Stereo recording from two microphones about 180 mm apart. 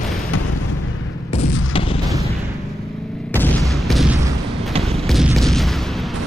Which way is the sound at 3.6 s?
Centre (ahead or behind).